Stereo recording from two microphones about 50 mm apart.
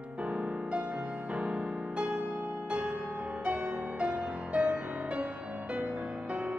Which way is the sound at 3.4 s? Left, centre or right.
Right.